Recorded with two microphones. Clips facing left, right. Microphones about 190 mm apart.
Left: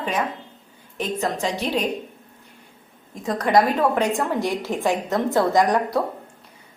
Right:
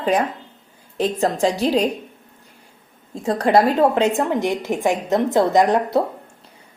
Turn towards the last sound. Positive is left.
turn(degrees=-25)  # may be behind; listen again after turning